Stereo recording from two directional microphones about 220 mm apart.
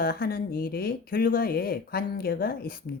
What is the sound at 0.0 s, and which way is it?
Speech, 40° left (ahead or behind).